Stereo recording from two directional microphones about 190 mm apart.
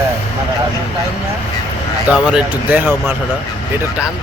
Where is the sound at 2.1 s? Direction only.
5° right (ahead or behind).